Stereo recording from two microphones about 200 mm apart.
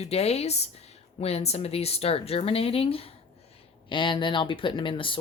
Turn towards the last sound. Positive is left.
turn(degrees=25)  # may be behind; listen again after turning